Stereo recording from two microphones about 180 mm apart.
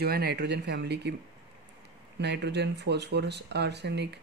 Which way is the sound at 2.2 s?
70° right (ahead or behind).